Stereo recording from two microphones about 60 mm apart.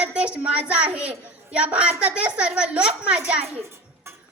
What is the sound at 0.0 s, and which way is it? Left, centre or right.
A child's voice, right.